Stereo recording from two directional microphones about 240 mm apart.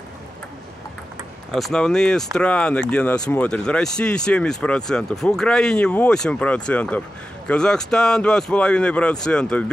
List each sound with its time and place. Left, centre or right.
1.5 s speech: centre